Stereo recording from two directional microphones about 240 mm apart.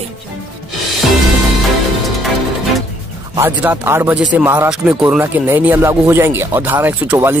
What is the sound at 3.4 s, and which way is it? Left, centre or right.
Speech, centre.